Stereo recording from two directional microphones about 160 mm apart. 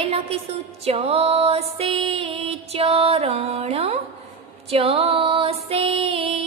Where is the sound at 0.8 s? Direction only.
35° right (ahead or behind).